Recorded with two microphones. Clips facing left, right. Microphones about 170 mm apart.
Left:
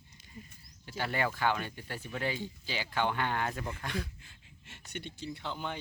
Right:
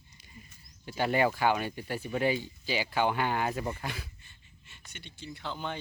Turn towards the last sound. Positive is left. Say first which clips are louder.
# right 1 dB
turn(degrees=15)  # may be behind; listen again after turning